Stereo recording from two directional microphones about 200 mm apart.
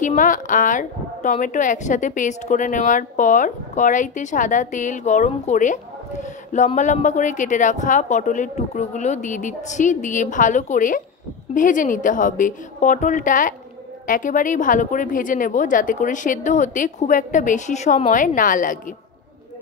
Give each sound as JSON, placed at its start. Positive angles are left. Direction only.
{"t": 0.0, "sound": "a woman's voice", "side_deg": 40}